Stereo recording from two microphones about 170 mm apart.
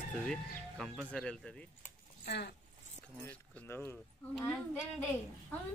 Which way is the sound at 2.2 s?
75° left (ahead or behind).